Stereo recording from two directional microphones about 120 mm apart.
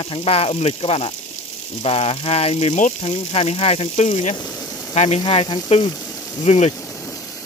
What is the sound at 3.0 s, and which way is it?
Speech, 60° left (ahead or behind).